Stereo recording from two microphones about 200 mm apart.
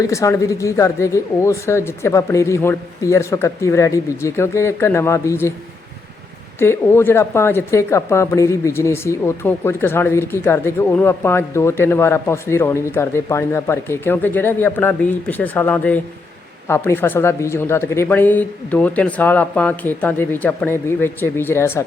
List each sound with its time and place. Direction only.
0.0 s speech: 15° left (ahead or behind)
6.6 s speech: 10° left (ahead or behind)